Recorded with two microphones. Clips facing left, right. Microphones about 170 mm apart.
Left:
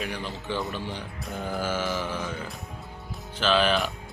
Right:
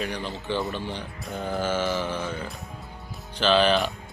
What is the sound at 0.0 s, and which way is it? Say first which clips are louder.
Speech: right 2 dB; 5° left (ahead or behind).